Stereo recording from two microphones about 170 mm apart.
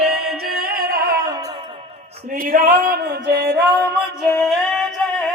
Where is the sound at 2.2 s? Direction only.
55° right (ahead or behind); by 3.9 s 75° right (ahead or behind).